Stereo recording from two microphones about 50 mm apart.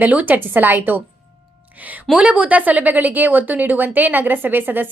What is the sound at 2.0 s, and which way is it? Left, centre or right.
A woman's voice, right.